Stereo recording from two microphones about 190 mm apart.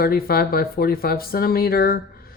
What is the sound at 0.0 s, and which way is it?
Speech, 50° left (ahead or behind).